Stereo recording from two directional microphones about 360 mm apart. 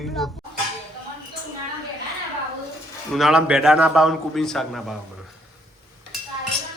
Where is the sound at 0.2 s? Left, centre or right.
Centre.